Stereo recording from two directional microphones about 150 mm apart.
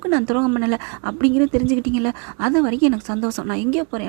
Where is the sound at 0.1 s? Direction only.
20° right (ahead or behind).